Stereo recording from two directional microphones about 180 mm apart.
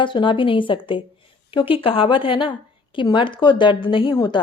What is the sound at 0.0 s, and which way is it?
Speech, 25° left (ahead or behind).